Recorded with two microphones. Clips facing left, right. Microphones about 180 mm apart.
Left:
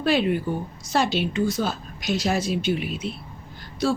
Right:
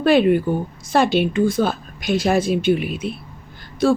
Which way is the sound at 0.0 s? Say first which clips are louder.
Right 7 dB; 55° right (ahead or behind).